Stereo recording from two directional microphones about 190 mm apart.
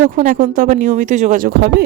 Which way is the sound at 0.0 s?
45° right (ahead or behind).